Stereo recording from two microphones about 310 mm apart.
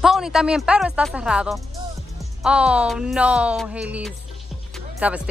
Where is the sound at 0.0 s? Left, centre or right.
Centre.